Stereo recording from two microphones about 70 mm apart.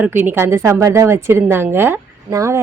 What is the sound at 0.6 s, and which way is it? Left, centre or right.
Speech, right.